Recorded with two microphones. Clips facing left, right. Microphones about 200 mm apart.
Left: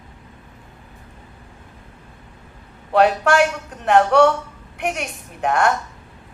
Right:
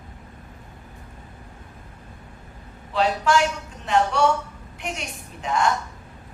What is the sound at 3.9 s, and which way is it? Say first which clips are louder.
Music: left 7 dB; 60° left (ahead or behind).